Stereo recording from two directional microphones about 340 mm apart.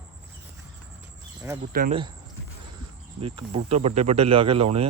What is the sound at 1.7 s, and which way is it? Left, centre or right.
Speech, right.